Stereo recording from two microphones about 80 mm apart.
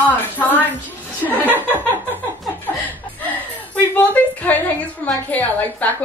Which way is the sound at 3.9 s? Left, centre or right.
Left.